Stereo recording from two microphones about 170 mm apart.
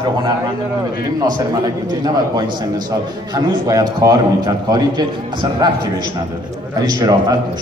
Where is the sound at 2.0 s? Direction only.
25° right (ahead or behind).